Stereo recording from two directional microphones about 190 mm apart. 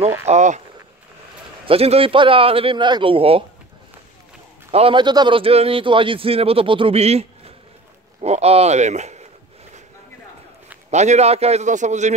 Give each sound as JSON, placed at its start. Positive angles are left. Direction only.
{"t": 0.3, "sound": "a man's voice", "side_deg": -40}
{"t": 1.7, "sound": "a man's voice", "side_deg": -30}
{"t": 4.6, "sound": "a man's voice", "side_deg": -30}
{"t": 10.9, "sound": "a man's voice", "side_deg": -35}